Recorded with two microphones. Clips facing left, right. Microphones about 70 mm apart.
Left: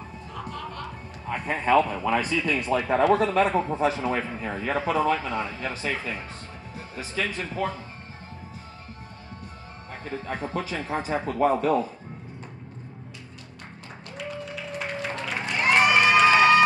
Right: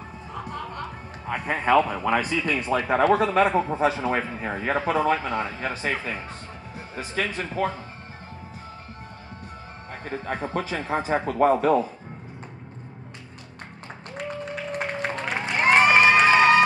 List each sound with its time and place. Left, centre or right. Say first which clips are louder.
0.3 s music: right 2 dB; right
1.5 s a man's voice: right 1 dB; right
10.3 s a man's voice: right 2 dB; right
14.1 s music: right 3 dB; right
15.3 s run: right 3 dB; right